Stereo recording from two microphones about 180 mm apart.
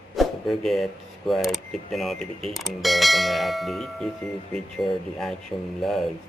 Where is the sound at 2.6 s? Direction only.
Centre (ahead or behind).